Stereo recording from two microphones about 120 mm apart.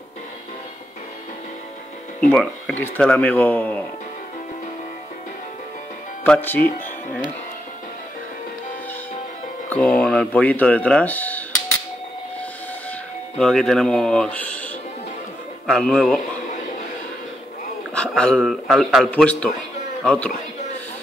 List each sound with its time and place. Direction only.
2.1 s speech: 10° left (ahead or behind)
6.2 s speech: 15° left (ahead or behind)
9.7 s speech: 10° left (ahead or behind)
13.4 s speech: 5° left (ahead or behind)
15.6 s speech: 5° left (ahead or behind)
17.9 s speech: 10° left (ahead or behind)
19.0 s speech: 10° left (ahead or behind)